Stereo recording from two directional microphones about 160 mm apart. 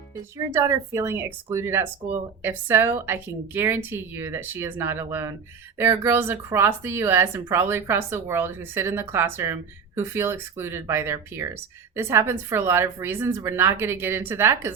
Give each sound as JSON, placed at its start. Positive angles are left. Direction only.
{"t": 0.3, "sound": "speech", "side_deg": -20}